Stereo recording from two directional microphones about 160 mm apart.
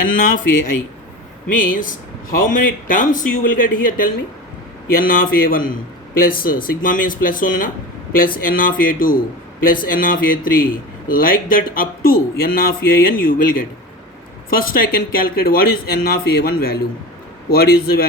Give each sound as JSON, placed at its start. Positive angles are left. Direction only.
{"t": 0.2, "sound": "a man's voice", "side_deg": 55}